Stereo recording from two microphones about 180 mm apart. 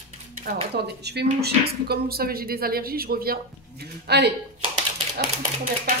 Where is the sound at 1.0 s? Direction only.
65° right (ahead or behind).